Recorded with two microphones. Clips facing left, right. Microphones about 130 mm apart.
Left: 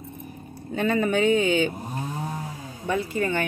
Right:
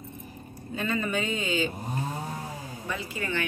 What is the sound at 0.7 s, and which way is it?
Speech, 60° left (ahead or behind).